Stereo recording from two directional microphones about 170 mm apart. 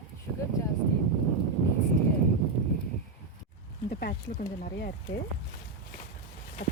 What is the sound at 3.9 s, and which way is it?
Speech, 60° left (ahead or behind).